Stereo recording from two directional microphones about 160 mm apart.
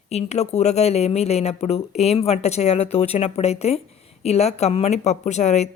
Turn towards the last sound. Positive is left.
turn(degrees=45)  # may be behind; listen again after turning